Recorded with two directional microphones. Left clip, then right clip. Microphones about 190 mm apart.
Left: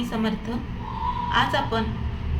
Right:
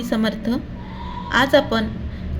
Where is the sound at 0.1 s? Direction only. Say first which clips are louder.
Right 6 dB; 40° right (ahead or behind).